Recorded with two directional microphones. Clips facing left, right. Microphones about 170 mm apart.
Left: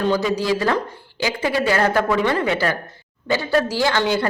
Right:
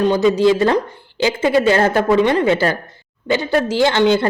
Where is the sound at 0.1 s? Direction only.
25° right (ahead or behind).